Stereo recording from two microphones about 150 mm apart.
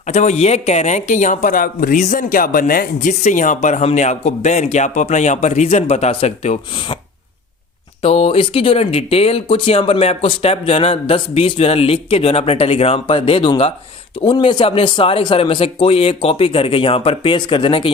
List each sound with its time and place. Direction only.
0.0 s speech: 50° left (ahead or behind); by 2.0 s 70° left (ahead or behind)
2.0 s speech: 60° left (ahead or behind)
8.0 s speech: 40° left (ahead or behind)